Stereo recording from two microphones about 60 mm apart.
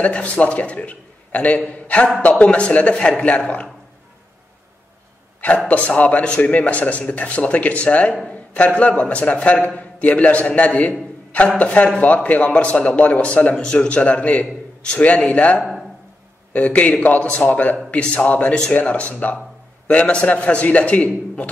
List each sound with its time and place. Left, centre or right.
0.0 s a man's voice: left
5.7 s a man's voice: left